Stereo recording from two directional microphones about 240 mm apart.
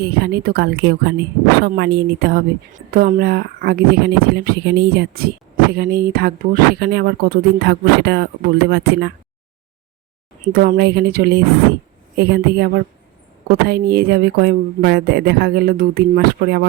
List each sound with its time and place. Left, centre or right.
0.0 s a woman's voice: right
10.4 s speech: right